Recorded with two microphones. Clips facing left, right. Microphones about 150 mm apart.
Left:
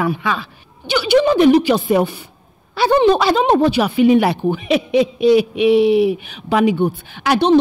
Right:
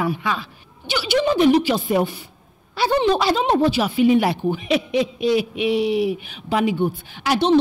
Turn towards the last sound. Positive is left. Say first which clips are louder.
# left 4 dB
turn(degrees=55)  # may be behind; listen again after turning